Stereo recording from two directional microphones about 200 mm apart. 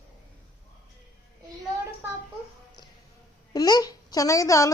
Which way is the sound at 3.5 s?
20° left (ahead or behind).